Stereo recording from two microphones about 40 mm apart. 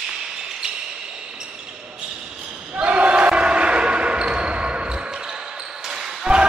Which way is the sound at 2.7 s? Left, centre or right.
Right.